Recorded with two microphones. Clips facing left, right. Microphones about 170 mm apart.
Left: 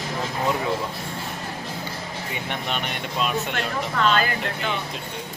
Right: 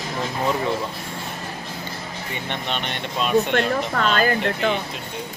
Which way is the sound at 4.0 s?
45° right (ahead or behind).